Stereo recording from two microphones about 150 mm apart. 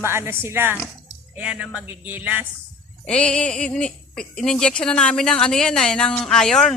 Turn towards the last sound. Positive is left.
turn(degrees=5)  # may be behind; listen again after turning